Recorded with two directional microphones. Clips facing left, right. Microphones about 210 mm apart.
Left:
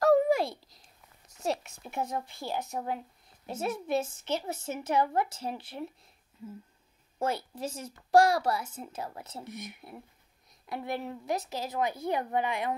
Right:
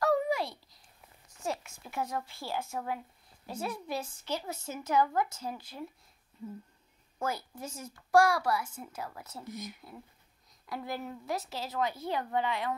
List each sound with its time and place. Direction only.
0.0 s a sound: 50° left (ahead or behind)
1.9 s a child's voice: 20° left (ahead or behind)
7.2 s a child's voice: 30° left (ahead or behind)